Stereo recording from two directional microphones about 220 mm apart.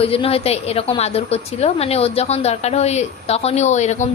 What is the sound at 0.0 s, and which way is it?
A woman's voice, 25° left (ahead or behind).